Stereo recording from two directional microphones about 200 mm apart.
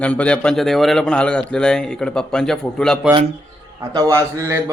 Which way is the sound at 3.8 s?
20° right (ahead or behind).